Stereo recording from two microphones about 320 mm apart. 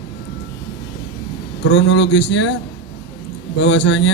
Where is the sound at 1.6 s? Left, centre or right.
Left.